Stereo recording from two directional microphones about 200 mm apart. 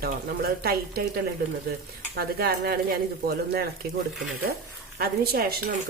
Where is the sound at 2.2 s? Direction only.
50° right (ahead or behind).